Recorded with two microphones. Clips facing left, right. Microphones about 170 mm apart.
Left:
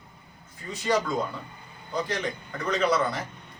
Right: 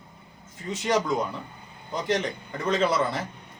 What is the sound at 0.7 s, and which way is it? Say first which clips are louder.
A man's voice: right 1 dB; 20° right (ahead or behind).